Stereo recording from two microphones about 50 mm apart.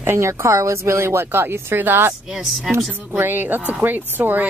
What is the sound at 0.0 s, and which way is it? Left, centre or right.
Speech, right.